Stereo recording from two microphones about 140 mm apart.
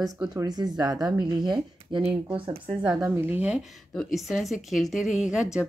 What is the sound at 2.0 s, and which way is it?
Speech, 40° right (ahead or behind).